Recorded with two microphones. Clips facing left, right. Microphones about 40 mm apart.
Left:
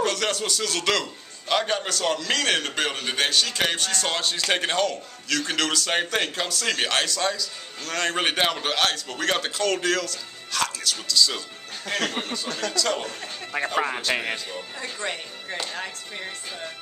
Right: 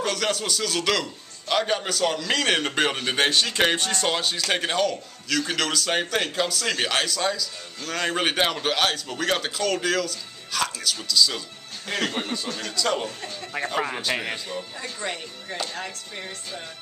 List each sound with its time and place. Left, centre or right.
0.0 s a man's voice: centre
4.1 s a man's voice: centre
13.5 s a man's voice: centre